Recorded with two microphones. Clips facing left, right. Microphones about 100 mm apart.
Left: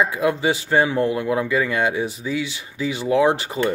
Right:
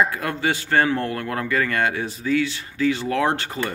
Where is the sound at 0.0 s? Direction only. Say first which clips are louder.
Left 3 dB; 15° left (ahead or behind).